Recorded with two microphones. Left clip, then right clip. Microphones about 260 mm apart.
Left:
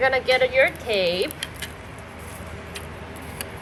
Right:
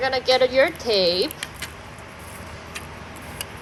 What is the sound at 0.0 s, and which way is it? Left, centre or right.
Speech, centre.